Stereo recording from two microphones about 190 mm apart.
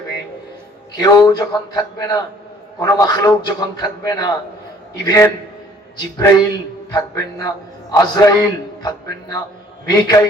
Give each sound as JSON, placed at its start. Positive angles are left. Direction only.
{"t": 0.9, "sound": "a man's voice", "side_deg": 20}
{"t": 9.8, "sound": "a man's voice", "side_deg": 20}